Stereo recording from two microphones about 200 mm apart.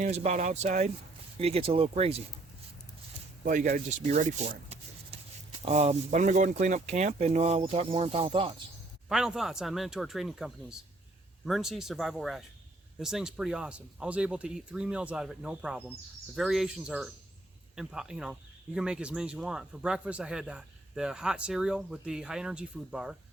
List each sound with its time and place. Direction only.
0.0 s speech: 35° right (ahead or behind)
3.4 s speech: 40° right (ahead or behind)
5.1 s writing: 30° right (ahead or behind)
5.5 s speech: 30° right (ahead or behind)
9.0 s speech: centre (ahead or behind)